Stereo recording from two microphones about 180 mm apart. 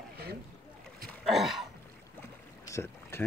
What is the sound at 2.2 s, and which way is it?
Boat, 15° left (ahead or behind).